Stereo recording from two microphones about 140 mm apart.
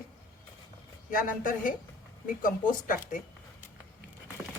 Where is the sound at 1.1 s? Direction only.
80° left.